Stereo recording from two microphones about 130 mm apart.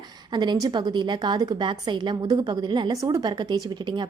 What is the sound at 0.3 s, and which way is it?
A woman's voice, 35° right (ahead or behind).